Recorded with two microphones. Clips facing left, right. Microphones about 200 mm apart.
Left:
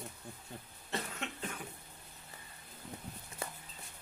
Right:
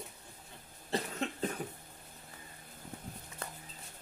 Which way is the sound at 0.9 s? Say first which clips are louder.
Right 5 dB; 35° right (ahead or behind).